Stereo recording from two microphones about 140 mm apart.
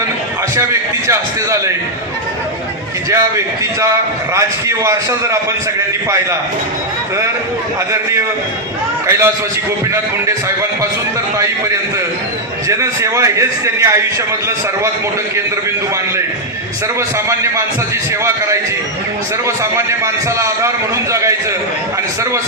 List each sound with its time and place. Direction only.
0.5 s a man's voice: 20° right (ahead or behind)
3.1 s a man's voice: 20° right (ahead or behind)
9.0 s a man's voice: 20° right (ahead or behind)
12.6 s a man's voice: 20° right (ahead or behind)
19.5 s a man's voice: 20° right (ahead or behind)